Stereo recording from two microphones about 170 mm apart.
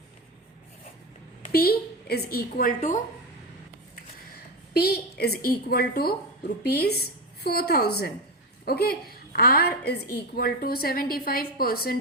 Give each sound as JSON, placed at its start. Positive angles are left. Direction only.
{"t": 1.5, "sound": "a woman's voice", "side_deg": 65}
{"t": 4.7, "sound": "a woman's voice", "side_deg": 70}